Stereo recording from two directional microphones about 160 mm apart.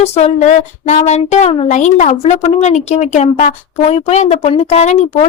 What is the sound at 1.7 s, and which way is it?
Speech, 50° left (ahead or behind).